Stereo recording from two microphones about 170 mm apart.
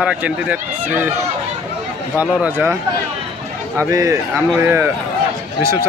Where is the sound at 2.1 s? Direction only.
10° right (ahead or behind).